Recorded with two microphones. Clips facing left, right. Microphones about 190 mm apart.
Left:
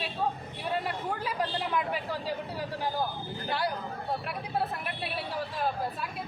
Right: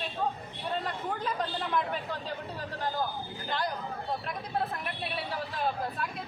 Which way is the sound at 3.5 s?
10° left (ahead or behind).